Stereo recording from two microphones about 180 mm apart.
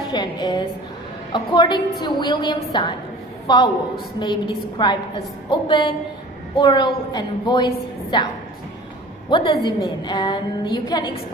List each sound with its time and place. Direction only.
0.1 s music: 25° left (ahead or behind)
1.3 s a woman's voice: 25° left (ahead or behind)
9.3 s a woman's voice: 25° left (ahead or behind)